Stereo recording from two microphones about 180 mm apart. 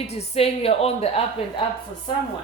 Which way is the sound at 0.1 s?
35° left (ahead or behind).